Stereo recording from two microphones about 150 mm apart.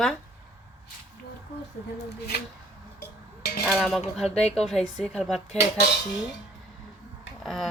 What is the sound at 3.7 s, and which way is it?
Speech, centre (ahead or behind).